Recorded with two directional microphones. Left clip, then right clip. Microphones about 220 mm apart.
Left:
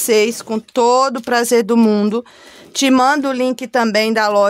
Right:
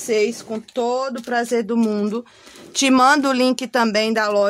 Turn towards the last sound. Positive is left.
turn(degrees=20)  # may be behind; listen again after turning